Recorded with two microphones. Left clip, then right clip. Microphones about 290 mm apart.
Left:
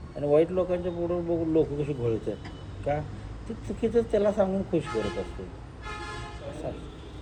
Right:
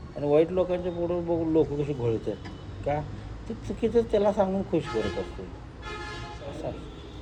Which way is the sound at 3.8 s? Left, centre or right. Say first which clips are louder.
Right 1 dB; centre.